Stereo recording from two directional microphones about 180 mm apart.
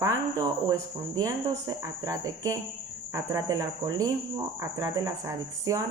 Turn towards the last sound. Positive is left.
turn(degrees=-20)  # may be behind; listen again after turning